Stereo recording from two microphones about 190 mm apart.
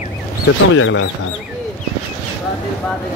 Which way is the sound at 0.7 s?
90° left.